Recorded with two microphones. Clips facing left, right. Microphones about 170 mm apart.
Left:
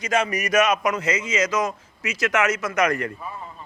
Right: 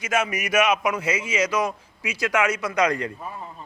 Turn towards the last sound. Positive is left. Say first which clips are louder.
# even
turn(degrees=-15)  # may be behind; listen again after turning